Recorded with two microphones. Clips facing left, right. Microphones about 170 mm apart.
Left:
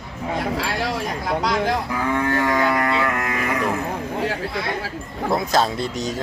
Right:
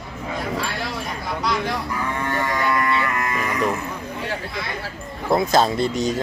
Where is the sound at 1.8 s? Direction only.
90° left; by 3.5 s 70° left (ahead or behind).